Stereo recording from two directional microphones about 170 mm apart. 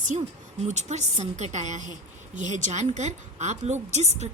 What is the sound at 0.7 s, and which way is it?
A woman's voice, 45° right (ahead or behind).